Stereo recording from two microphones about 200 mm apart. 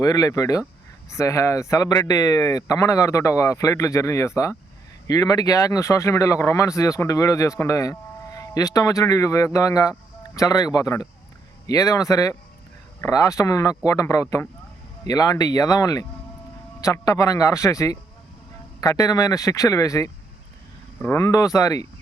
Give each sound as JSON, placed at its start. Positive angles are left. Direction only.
{"t": 0.0, "sound": "speech", "side_deg": 20}